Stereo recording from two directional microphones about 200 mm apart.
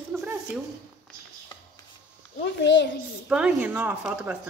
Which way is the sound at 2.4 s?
60° left (ahead or behind).